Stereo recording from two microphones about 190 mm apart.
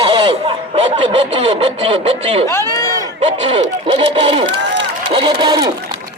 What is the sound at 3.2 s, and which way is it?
Speech, 30° right (ahead or behind).